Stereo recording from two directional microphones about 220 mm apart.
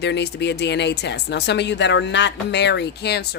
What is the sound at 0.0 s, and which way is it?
Speech, 50° left (ahead or behind).